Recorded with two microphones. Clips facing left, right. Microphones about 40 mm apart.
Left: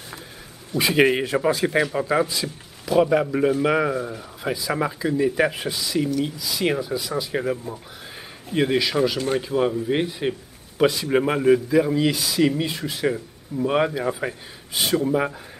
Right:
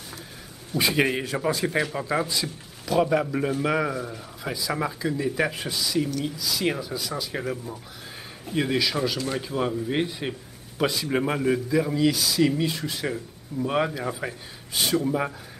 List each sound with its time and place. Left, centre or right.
0.7 s speech: centre
1.0 s a man's voice: left